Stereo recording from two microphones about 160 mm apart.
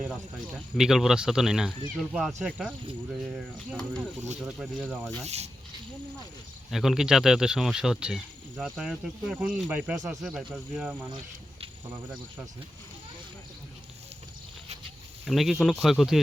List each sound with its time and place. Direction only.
0.0 s speech: 5° right (ahead or behind)
3.8 s speech: 5° left (ahead or behind)
5.2 s speech: 40° right (ahead or behind)
6.7 s speech: centre (ahead or behind)
15.3 s speech: centre (ahead or behind)